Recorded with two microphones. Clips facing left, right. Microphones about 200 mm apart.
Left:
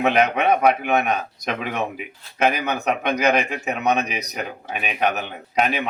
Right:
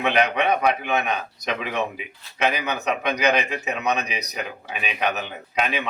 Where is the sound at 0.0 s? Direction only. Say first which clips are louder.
Left 3 dB; 45° left (ahead or behind).